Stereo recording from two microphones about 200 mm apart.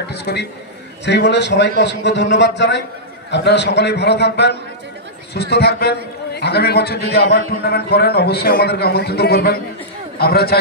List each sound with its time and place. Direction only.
0.1 s a man's voice: 55° left (ahead or behind)